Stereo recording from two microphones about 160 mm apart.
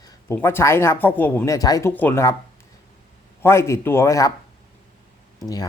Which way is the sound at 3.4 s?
15° left (ahead or behind).